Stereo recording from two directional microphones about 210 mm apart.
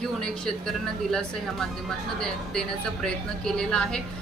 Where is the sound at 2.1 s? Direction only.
5° left (ahead or behind).